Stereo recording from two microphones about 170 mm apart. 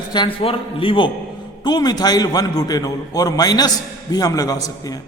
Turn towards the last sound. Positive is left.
turn(degrees=20)  # may be behind; listen again after turning